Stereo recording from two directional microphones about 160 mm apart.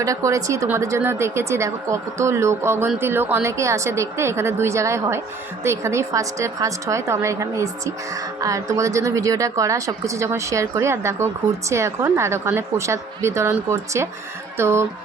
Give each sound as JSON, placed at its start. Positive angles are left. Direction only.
{"t": 0.0, "sound": "a woman's voice", "side_deg": -20}